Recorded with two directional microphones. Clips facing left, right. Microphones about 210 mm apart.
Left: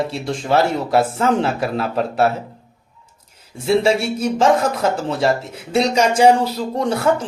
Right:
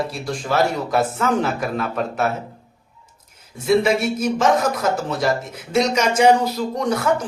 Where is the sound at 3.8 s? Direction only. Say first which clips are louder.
Left 1 dB; 30° left (ahead or behind).